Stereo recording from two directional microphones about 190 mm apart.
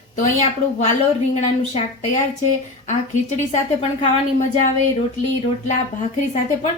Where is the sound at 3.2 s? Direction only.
35° left (ahead or behind).